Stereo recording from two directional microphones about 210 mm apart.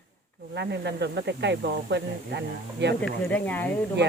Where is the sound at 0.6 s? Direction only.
55° right (ahead or behind).